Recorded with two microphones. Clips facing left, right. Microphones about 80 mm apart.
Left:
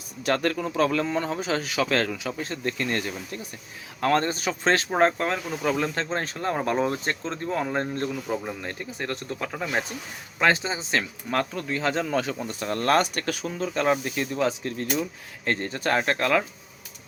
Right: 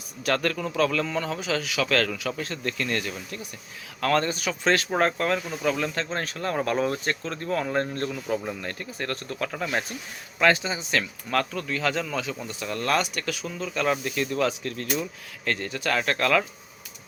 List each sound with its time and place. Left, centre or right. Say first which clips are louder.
0.2 s speech: left 1 dB; left
10.4 s speech: right 1 dB; left
12.1 s speech: left 4 dB; left; by 16.5 s centre